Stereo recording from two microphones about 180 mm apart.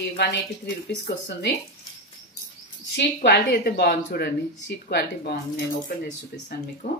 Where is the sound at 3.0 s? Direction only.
60° left (ahead or behind).